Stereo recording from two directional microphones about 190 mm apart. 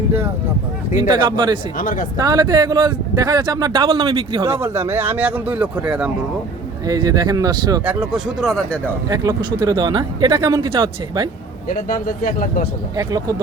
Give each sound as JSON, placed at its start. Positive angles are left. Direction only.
{"t": 0.9, "sound": "speech", "side_deg": -20}
{"t": 1.8, "sound": "speech", "side_deg": 45}
{"t": 2.1, "sound": "speech", "side_deg": -20}
{"t": 4.6, "sound": "speech", "side_deg": -10}
{"t": 6.8, "sound": "speech", "side_deg": -20}
{"t": 7.9, "sound": "speech", "side_deg": -5}
{"t": 9.0, "sound": "speech", "side_deg": -20}
{"t": 11.7, "sound": "speech", "side_deg": 50}
{"t": 13.0, "sound": "speech", "side_deg": -20}